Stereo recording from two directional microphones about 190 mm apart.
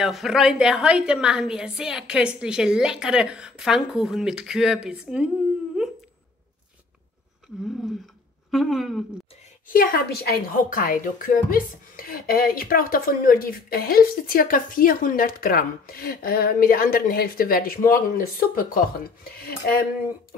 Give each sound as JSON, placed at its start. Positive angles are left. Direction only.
{"t": 0.0, "sound": "a woman's voice", "side_deg": 0}
{"t": 8.5, "sound": "a woman's voice", "side_deg": 0}
{"t": 9.7, "sound": "speech", "side_deg": 50}